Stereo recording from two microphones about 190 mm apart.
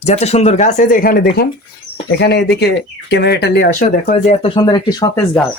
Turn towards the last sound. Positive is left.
turn(degrees=20)  # may be behind; listen again after turning